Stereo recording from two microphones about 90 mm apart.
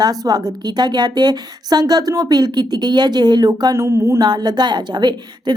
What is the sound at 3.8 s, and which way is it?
Speech, 35° right (ahead or behind).